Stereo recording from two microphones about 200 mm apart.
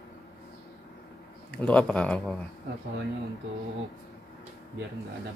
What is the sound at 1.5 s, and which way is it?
Speech, 5° left (ahead or behind).